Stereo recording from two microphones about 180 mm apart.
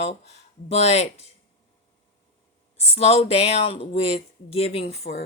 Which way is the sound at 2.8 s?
35° left (ahead or behind).